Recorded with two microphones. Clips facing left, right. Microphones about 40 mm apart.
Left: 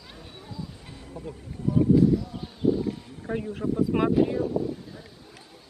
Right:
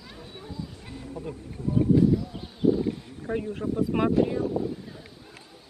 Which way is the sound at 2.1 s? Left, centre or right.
Centre.